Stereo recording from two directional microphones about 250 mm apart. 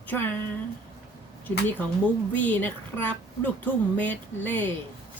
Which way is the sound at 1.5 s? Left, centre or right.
Centre.